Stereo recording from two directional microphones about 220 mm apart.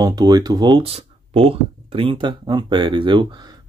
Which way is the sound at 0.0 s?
15° right (ahead or behind).